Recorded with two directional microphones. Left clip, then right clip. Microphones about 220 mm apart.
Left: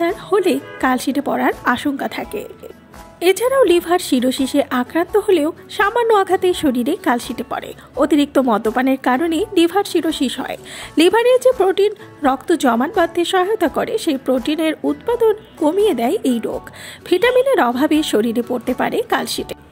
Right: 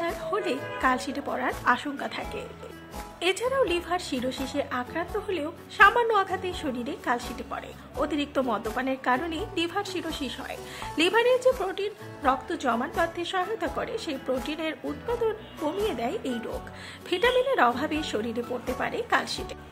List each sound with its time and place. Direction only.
0.0 s a woman's voice: 30° left (ahead or behind)